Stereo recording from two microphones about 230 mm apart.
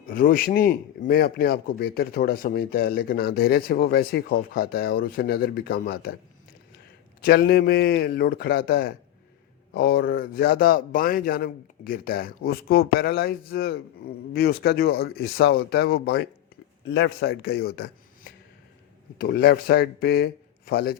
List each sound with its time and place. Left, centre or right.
0.1 s a man's voice: left
7.2 s a man's voice: left